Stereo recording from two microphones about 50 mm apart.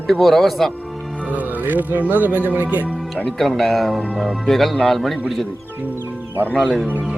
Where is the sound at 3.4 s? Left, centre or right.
Centre.